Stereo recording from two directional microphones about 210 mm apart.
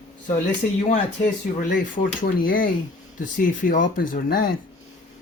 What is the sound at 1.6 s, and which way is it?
Speech, 40° left (ahead or behind).